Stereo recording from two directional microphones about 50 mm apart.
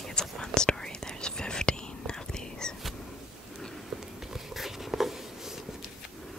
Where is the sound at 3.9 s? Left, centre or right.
Centre.